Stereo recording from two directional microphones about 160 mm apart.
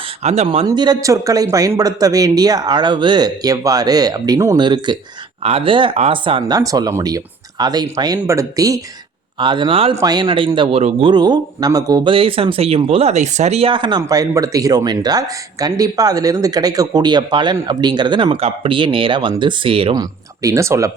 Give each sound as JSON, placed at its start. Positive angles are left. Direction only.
{"t": 0.2, "sound": "speech", "side_deg": -40}
{"t": 0.6, "sound": "speech", "side_deg": -25}
{"t": 5.4, "sound": "speech", "side_deg": -40}
{"t": 6.6, "sound": "speech", "side_deg": -20}
{"t": 9.9, "sound": "speech", "side_deg": -25}
{"t": 11.1, "sound": "speech", "side_deg": -25}